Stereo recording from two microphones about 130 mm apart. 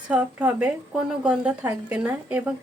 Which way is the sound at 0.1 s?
10° right (ahead or behind).